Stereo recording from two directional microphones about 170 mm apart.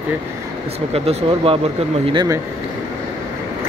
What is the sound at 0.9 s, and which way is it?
Speech, 35° right (ahead or behind).